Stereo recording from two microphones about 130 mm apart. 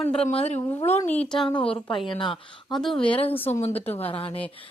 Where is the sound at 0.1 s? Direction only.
50° left (ahead or behind).